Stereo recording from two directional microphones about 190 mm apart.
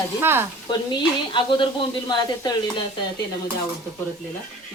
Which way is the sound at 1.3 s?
25° left (ahead or behind).